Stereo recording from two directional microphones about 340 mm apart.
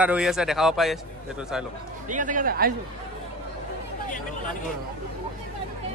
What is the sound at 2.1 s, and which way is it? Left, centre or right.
Speech, right.